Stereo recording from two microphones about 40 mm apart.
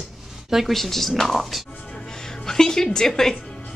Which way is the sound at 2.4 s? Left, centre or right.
Centre.